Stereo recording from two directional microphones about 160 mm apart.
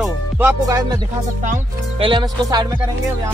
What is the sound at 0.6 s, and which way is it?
Speech, 20° right (ahead or behind).